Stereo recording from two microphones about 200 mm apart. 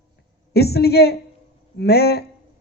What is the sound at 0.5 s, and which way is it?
A man's voice, 55° left (ahead or behind).